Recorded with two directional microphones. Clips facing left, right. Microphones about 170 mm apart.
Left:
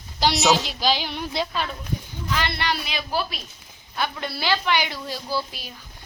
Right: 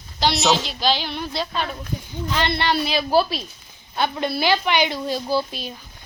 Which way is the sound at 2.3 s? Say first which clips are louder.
Right 5 dB; 25° right (ahead or behind).